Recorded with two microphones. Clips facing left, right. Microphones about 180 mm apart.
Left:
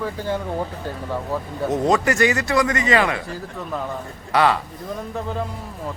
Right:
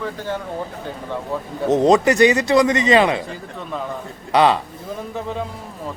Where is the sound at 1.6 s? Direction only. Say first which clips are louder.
Right 5 dB; 20° right (ahead or behind).